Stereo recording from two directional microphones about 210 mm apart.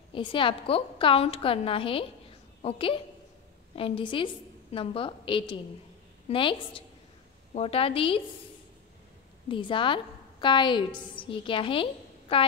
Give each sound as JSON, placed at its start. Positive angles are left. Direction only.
{"t": 0.1, "sound": "a woman's voice", "side_deg": 25}
{"t": 9.5, "sound": "a woman's voice", "side_deg": 25}